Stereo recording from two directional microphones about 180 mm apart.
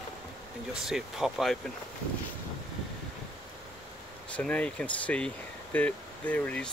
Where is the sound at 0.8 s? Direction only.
Centre (ahead or behind).